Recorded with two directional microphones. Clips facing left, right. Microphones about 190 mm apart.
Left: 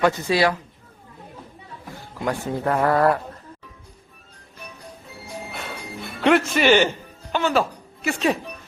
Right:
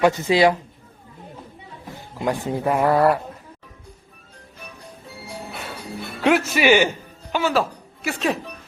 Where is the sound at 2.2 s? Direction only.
15° right (ahead or behind).